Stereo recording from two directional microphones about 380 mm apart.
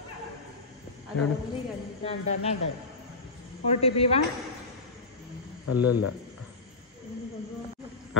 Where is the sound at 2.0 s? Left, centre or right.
Centre.